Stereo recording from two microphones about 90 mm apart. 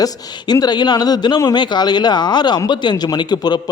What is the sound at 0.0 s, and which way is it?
A man's voice, 45° left (ahead or behind).